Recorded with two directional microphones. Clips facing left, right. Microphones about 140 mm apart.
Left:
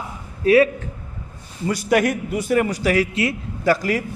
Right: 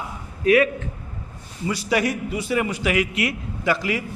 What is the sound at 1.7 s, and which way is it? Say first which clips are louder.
A man's voice: left 4 dB; 50° left (ahead or behind).